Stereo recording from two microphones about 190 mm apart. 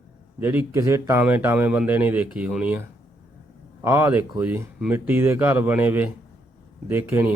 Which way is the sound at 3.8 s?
10° right (ahead or behind).